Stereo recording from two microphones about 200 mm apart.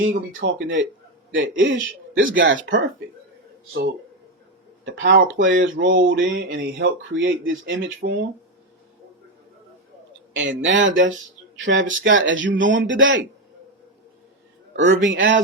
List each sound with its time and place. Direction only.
0.0 s speech: 70° right (ahead or behind)
4.9 s speech: 65° right (ahead or behind)
6.3 s speech: 60° right (ahead or behind)
10.3 s speech: 70° right (ahead or behind)
14.8 s speech: 70° right (ahead or behind)